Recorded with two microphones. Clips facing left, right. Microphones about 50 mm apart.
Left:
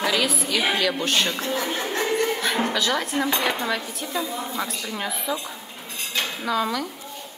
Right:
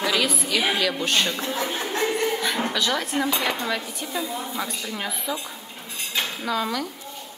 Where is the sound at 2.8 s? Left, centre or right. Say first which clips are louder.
Left 1 dB; centre.